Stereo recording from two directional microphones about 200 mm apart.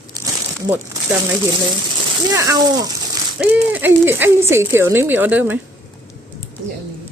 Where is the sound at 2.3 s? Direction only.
15° right (ahead or behind).